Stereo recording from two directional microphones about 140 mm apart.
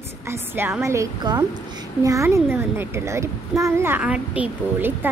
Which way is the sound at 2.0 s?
20° right (ahead or behind).